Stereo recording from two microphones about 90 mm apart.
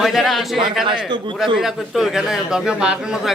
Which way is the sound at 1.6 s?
5° right (ahead or behind).